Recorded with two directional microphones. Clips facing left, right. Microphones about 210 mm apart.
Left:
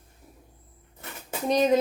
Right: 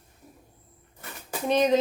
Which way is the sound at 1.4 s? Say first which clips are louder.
Even; 40° left (ahead or behind).